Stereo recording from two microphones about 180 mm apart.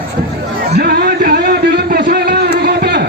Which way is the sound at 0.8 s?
60° right (ahead or behind).